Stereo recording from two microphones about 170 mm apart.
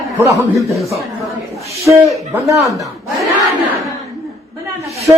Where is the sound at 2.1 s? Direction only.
20° right (ahead or behind).